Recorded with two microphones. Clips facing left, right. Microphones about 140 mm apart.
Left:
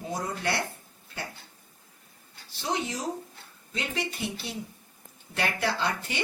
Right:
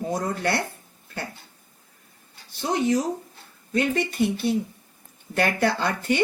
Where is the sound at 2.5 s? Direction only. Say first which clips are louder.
Right 9 dB; 50° right (ahead or behind).